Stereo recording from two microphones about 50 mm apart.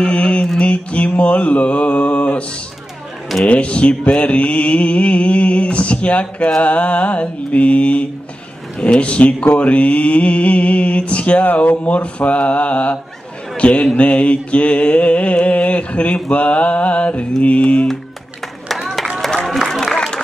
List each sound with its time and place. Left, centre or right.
0.0 s mantra: left
3.4 s mantra: left
13.6 s a man's voice: left
13.9 s mantra: left
18.8 s a sound: centre
19.1 s music: centre